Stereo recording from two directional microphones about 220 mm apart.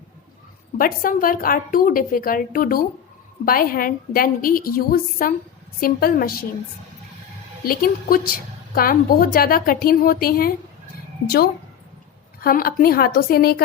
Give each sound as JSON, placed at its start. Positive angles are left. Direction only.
{"t": 0.8, "sound": "a woman's voice", "side_deg": 40}
{"t": 7.6, "sound": "a woman's voice", "side_deg": 40}
{"t": 12.4, "sound": "a woman's voice", "side_deg": 40}